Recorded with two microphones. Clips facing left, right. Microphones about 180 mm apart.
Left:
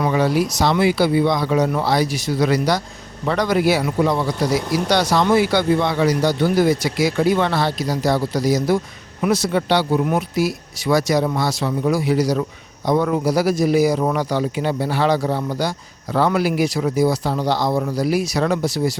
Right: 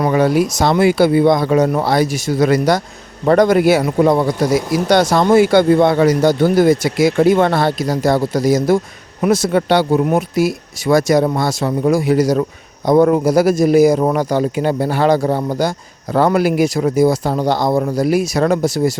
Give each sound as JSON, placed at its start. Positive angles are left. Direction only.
{"t": 0.0, "sound": "speech", "side_deg": -50}